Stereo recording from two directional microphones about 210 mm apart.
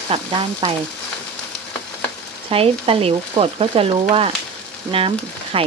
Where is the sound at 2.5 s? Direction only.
25° right (ahead or behind).